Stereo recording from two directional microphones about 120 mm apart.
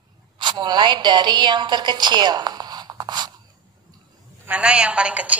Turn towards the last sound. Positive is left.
turn(degrees=-10)  # may be behind; listen again after turning